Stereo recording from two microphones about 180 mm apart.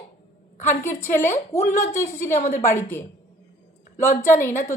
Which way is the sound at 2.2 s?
45° left (ahead or behind).